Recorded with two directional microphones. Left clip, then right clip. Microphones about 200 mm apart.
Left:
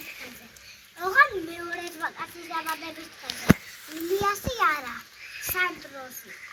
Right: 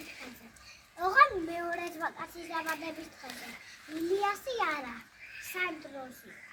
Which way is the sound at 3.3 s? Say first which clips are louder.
Left 12 dB; 40° left (ahead or behind).